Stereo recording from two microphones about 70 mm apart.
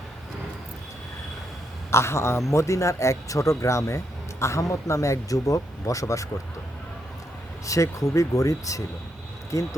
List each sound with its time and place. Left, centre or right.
1.9 s a man's voice: left
7.7 s speech: left